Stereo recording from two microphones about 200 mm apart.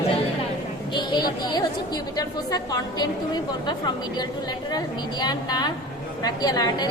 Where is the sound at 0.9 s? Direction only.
20° left (ahead or behind).